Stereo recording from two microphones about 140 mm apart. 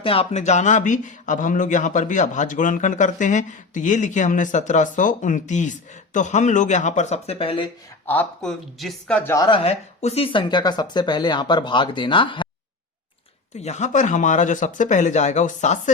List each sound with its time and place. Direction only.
0.0 s speech: 40° left (ahead or behind)
8.0 s speech: 10° left (ahead or behind)
9.5 s speech: 45° left (ahead or behind)
13.6 s speech: 55° left (ahead or behind)